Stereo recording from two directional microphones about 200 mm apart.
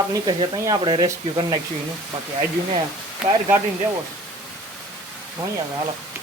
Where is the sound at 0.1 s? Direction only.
20° right (ahead or behind).